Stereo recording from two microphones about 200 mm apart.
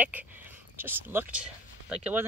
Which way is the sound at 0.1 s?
10° right (ahead or behind).